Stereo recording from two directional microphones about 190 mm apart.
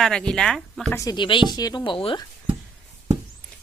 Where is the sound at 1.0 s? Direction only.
20° left (ahead or behind).